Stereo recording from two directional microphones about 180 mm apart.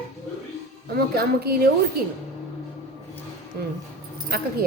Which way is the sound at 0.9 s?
60° right (ahead or behind).